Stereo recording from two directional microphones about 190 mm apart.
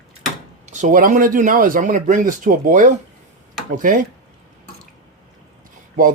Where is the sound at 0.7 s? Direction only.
45° right (ahead or behind).